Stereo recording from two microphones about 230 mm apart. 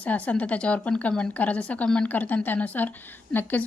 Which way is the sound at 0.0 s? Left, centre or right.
Centre.